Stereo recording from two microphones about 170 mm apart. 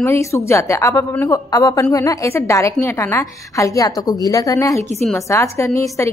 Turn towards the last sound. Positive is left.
turn(degrees=15)  # may be behind; listen again after turning